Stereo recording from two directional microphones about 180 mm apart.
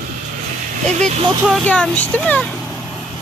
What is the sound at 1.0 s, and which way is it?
Speech, 40° right (ahead or behind).